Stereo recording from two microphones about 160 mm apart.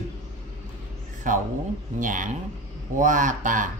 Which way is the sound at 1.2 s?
55° right (ahead or behind).